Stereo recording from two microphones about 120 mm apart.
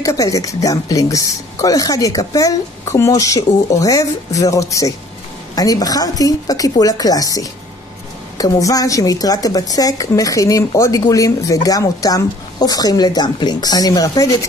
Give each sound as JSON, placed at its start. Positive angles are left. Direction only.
{"t": 0.0, "sound": "a woman's voice", "side_deg": 25}